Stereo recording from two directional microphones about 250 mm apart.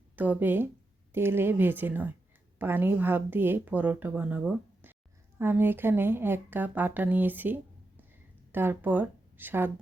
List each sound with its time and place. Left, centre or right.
0.2 s speech: centre